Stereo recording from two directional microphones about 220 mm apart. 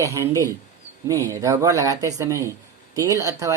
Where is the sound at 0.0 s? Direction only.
15° right (ahead or behind).